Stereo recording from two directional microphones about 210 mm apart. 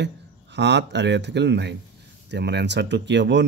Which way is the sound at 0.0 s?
55° right (ahead or behind).